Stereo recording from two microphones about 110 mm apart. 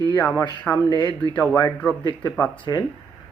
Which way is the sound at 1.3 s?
10° left (ahead or behind).